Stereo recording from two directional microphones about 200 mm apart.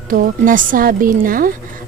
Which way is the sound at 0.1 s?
45° right (ahead or behind).